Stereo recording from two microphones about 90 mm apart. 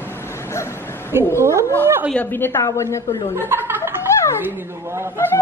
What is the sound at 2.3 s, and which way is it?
Speech, 25° left (ahead or behind).